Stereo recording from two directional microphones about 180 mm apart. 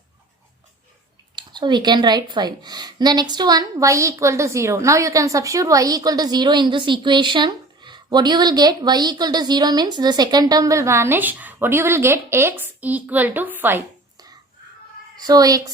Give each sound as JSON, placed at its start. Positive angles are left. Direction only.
{"t": 1.4, "sound": "a woman's voice", "side_deg": -25}
{"t": 15.2, "sound": "a woman's voice", "side_deg": -20}